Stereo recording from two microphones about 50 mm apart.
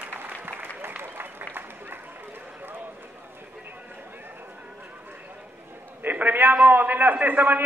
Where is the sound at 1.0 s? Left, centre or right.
Right.